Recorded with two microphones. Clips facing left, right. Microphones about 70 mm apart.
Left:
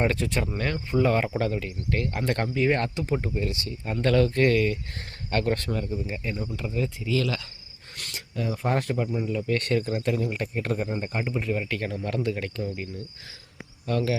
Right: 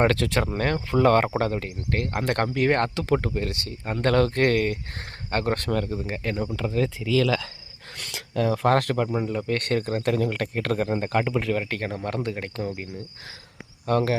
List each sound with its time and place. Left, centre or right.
0.0 s speech: right
0.5 s speech: right
0.9 s speech: right
2.9 s speech: right
5.3 s speech: right
5.7 s speech: right
8.1 s speech: right
11.7 s speech: right
13.8 s speech: right